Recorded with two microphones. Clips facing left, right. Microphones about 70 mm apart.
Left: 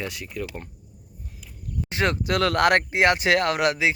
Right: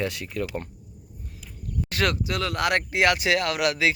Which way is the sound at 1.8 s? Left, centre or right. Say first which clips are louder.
Left 1 dB; left.